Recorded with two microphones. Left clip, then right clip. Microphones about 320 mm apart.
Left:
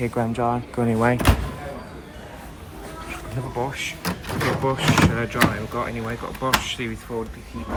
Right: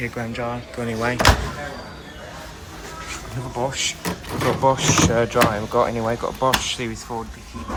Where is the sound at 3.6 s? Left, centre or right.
Centre.